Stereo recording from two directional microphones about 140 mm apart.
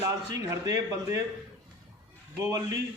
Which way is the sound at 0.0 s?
20° right (ahead or behind).